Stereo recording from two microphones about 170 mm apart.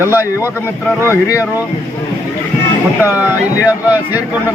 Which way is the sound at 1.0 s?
20° left (ahead or behind).